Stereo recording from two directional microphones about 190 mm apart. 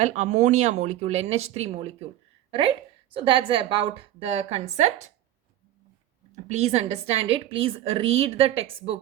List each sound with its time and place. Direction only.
0.0 s a woman's voice: 40° right (ahead or behind)
6.3 s a woman's voice: 35° right (ahead or behind)